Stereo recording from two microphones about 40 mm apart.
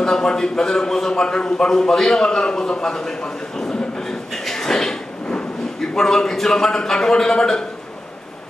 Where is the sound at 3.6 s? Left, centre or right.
Centre.